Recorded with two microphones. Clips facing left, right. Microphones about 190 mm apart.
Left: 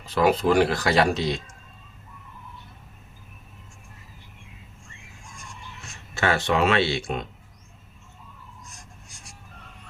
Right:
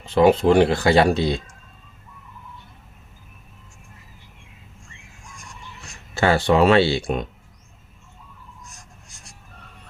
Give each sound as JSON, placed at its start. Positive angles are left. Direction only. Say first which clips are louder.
{"t": 0.0, "sound": "speech", "louder": "right 5 dB", "side_deg": -25}
{"t": 6.1, "sound": "speech", "louder": "right 6 dB", "side_deg": -35}